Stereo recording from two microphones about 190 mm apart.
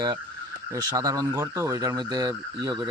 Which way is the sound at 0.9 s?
20° right (ahead or behind).